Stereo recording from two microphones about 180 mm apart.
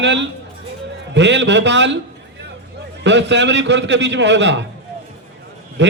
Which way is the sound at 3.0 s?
80° right.